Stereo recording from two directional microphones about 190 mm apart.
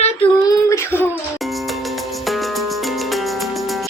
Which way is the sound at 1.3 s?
Centre (ahead or behind).